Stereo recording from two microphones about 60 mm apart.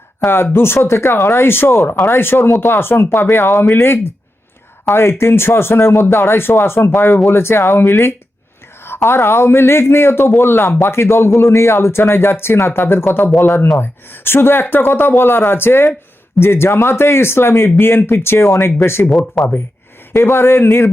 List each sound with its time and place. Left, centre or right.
0.3 s a man's voice: left
3.8 s a man's voice: left
19.1 s speech: centre
20.1 s speech: left